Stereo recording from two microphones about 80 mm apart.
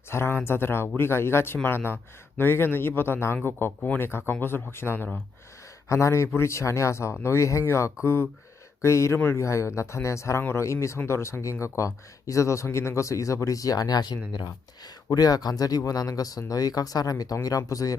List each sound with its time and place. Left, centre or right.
0.1 s speech: left
9.1 s speech: left
9.4 s speech: left
15.1 s speech: left